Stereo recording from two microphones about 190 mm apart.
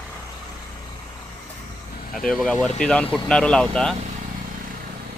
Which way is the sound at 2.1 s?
Centre (ahead or behind).